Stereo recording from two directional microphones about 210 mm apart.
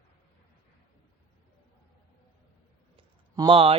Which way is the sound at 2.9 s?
25° right (ahead or behind).